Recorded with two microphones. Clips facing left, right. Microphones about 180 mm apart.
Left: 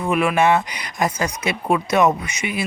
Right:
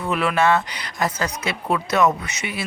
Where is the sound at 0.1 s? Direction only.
10° left (ahead or behind).